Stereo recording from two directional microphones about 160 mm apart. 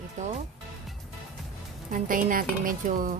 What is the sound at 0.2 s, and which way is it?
Music, 45° right (ahead or behind).